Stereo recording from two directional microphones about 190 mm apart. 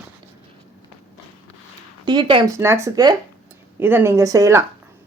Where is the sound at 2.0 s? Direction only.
25° right (ahead or behind).